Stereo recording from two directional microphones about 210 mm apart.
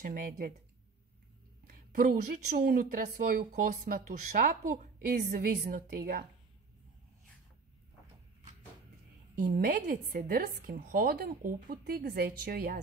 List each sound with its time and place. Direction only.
0.0 s speech: 40° right (ahead or behind)
2.5 s speech: 45° right (ahead or behind)
9.3 s speech: 40° right (ahead or behind)